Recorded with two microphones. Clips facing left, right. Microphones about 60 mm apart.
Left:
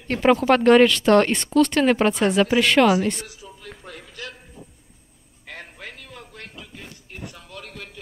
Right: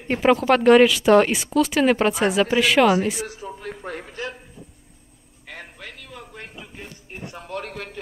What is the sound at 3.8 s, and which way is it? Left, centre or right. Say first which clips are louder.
Music: right 7 dB; right.